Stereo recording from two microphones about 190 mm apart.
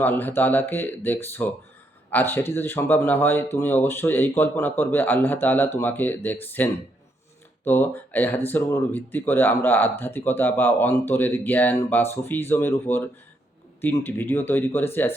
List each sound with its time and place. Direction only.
0.0 s speech: 10° left (ahead or behind)